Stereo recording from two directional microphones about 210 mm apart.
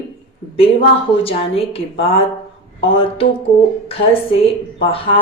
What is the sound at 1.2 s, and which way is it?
Speech, 25° left (ahead or behind).